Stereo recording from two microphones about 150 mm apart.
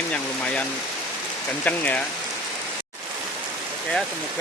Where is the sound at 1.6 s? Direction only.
10° left (ahead or behind).